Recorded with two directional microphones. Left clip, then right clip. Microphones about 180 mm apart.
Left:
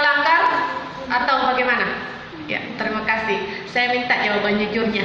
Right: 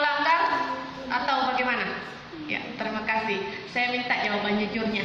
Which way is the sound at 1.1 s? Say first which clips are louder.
Left 7 dB; 50° left (ahead or behind).